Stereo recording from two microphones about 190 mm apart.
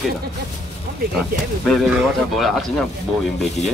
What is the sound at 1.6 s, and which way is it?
Speech, centre (ahead or behind).